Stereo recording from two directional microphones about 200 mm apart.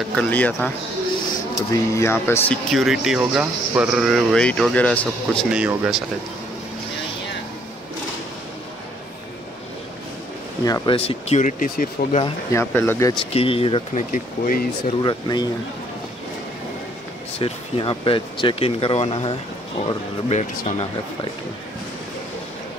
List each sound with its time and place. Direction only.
0.1 s speech: 5° left (ahead or behind)
1.7 s speech: 15° left (ahead or behind); by 6.0 s 5° right (ahead or behind)
10.6 s speech: 20° left (ahead or behind)
11.0 s speech: 30° left (ahead or behind)
12.5 s speech: 10° left (ahead or behind)
13.2 s speech: 30° left (ahead or behind)
14.1 s speech: 40° left (ahead or behind)
15.0 s speech: 20° left (ahead or behind)
17.4 s speech: 25° left (ahead or behind)